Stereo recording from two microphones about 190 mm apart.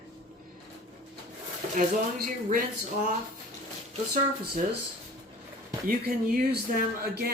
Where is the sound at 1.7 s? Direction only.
45° right (ahead or behind).